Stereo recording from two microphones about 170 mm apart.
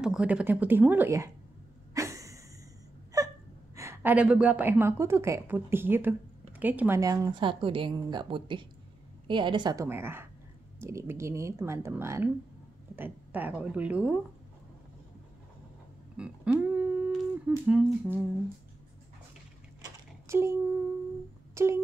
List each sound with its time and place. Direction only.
0.0 s a woman's voice: 5° right (ahead or behind)
2.0 s a sound: 20° right (ahead or behind)
3.1 s whimper: 20° right (ahead or behind)
3.7 s a woman's voice: 15° right (ahead or behind)
7.0 s a woman's voice: 20° right (ahead or behind)
9.8 s a woman's voice: 15° right (ahead or behind)
16.2 s a woman's voice: 10° right (ahead or behind)
19.8 s a sound: 15° right (ahead or behind)
21.5 s wail: 15° right (ahead or behind)